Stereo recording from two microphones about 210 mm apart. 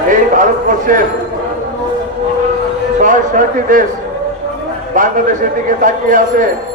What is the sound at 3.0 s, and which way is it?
Speech, 40° right (ahead or behind).